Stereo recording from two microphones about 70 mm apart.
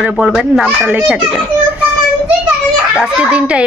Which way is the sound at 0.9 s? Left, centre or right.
Right.